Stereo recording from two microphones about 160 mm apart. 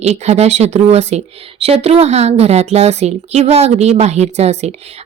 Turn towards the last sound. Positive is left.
turn(degrees=-45)  # may be behind; listen again after turning